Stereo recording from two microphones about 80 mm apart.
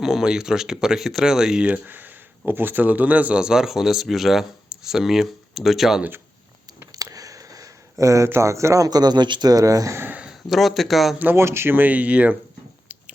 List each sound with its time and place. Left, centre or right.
0.0 s speech: centre
6.9 s speech: right
10.2 s a man's voice: centre
11.3 s speech: right; by 12.4 s centre